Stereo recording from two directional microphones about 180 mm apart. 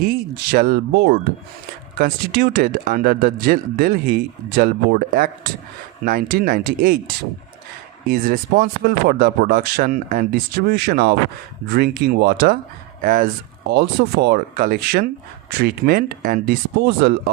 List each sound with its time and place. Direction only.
0.5 s speech: 55° right (ahead or behind)
8.1 s speech: 55° right (ahead or behind)